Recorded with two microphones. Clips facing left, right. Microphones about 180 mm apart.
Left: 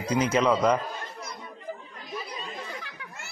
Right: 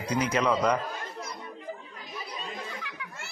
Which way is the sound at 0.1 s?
20° left (ahead or behind).